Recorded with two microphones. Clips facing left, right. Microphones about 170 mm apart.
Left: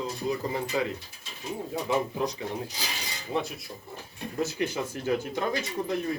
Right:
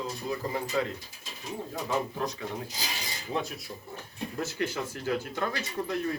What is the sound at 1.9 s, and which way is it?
Speech, 15° left (ahead or behind).